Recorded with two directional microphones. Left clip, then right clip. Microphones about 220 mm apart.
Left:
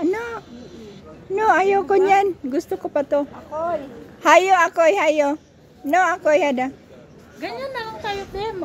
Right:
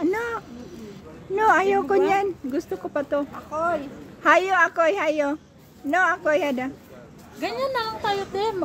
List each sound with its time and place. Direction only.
0.0 s cat: 10° left (ahead or behind)
1.3 s speech: 10° left (ahead or behind)
3.5 s a sound: 50° right (ahead or behind)
4.2 s speech: 15° left (ahead or behind)
7.3 s a woman's voice: 25° right (ahead or behind)